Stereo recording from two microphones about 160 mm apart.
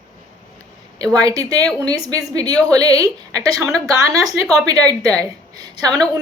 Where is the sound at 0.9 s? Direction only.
20° right (ahead or behind).